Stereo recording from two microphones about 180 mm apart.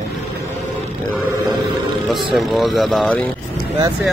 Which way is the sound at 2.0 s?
Centre (ahead or behind).